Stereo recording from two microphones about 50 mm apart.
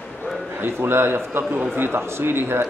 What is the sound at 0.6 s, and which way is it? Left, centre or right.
A man's voice, right.